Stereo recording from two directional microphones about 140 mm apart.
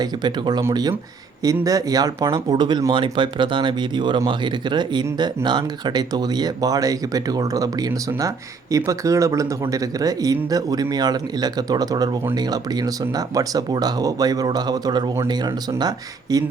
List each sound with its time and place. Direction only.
0.0 s speech: 30° right (ahead or behind)